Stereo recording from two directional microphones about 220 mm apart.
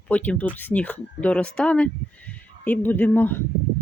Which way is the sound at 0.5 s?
5° left (ahead or behind).